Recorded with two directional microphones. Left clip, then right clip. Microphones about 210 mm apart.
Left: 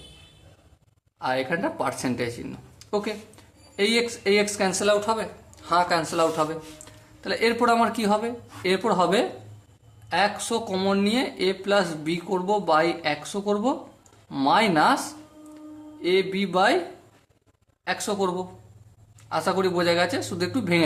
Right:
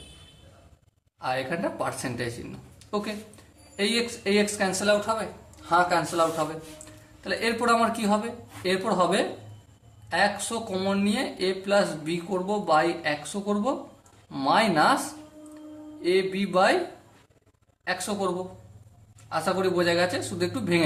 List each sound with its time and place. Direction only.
1.2 s speech: 30° left (ahead or behind)
16.0 s speech: 30° left (ahead or behind)
19.3 s speech: 30° left (ahead or behind)